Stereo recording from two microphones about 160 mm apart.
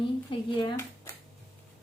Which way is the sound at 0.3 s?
35° left (ahead or behind).